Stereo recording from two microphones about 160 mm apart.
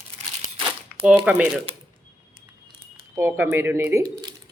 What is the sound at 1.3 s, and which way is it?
Speech, 5° right (ahead or behind).